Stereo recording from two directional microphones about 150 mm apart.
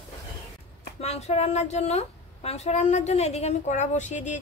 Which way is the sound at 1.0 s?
45° left (ahead or behind).